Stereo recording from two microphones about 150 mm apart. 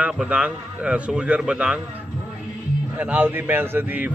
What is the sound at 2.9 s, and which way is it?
Speech, 10° right (ahead or behind).